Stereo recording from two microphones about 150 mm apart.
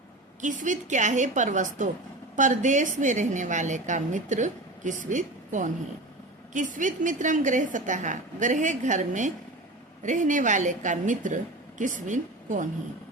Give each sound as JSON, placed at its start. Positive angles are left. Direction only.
{"t": 0.4, "sound": "a woman's voice", "side_deg": -55}